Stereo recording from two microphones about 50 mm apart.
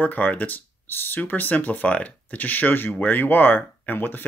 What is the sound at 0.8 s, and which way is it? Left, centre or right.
Speech, left.